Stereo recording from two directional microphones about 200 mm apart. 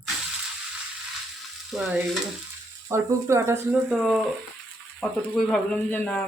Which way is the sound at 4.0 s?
Centre (ahead or behind).